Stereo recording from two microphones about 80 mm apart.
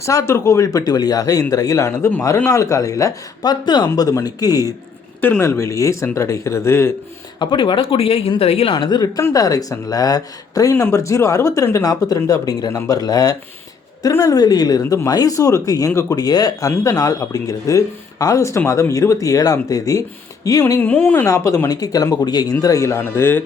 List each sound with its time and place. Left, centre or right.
0.0 s speech: left
3.8 s speech: left
5.4 s speech: left
7.3 s speech: left
9.3 s speech: left
20.7 s speech: left
21.2 s speech: left
21.7 s speech: left
22.6 s speech: left